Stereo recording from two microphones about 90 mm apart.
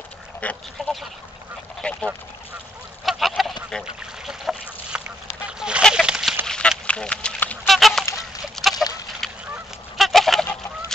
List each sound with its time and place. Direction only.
0.4 s speech: 15° left (ahead or behind)
0.8 s duck: 5° left (ahead or behind)
1.8 s speech: 10° left (ahead or behind)
3.1 s goose: centre (ahead or behind)
3.8 s duck: 5° right (ahead or behind)
5.5 s a sound: 10° right (ahead or behind)
6.0 s duck: 5° right (ahead or behind)
6.4 s duck: 10° left (ahead or behind)
7.6 s goose: centre (ahead or behind)
8.2 s a sound: centre (ahead or behind)
9.2 s goose: 5° left (ahead or behind)